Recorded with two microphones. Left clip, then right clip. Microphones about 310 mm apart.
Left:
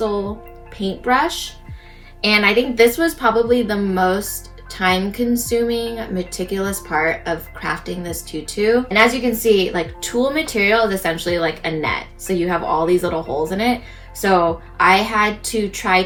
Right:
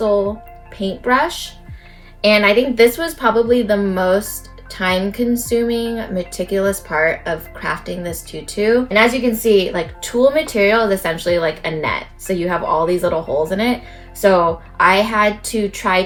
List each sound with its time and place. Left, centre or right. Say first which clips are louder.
0.9 s speech: right 1 dB; centre
2.2 s a woman's voice: right 3 dB; centre